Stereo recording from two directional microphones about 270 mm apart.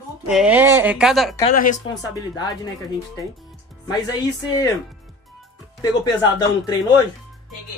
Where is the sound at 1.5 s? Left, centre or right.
Left.